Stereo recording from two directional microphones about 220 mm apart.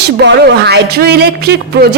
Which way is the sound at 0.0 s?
50° right (ahead or behind).